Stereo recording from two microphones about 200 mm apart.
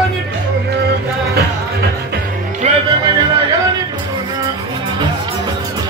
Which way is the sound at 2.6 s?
35° right (ahead or behind).